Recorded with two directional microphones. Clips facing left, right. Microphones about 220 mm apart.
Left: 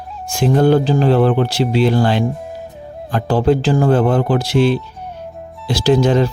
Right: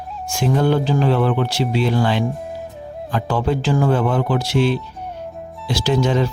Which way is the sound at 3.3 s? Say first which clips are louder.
Left 6 dB; 35° left (ahead or behind).